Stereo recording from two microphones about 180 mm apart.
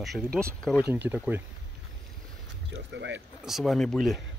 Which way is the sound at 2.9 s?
85° right.